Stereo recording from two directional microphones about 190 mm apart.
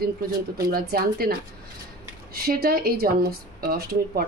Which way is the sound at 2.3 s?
50° right (ahead or behind).